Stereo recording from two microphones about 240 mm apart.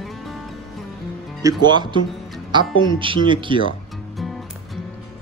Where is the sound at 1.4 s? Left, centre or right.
Centre.